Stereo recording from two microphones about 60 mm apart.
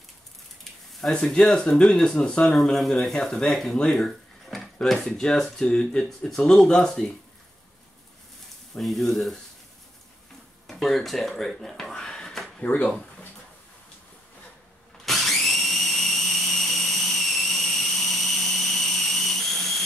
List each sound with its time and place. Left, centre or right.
1.2 s speech: centre
2.5 s speech: centre
8.7 s speech: centre
10.7 s a sound: centre
12.6 s speech: left
15.0 s drill: centre